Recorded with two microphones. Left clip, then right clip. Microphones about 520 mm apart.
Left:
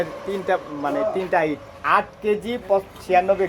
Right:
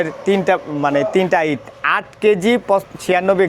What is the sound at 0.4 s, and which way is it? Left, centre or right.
A man's voice, right.